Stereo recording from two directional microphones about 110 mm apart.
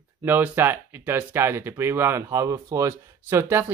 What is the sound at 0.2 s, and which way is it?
Speech, 20° right (ahead or behind).